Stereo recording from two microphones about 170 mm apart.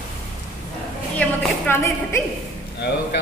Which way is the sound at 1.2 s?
15° left (ahead or behind).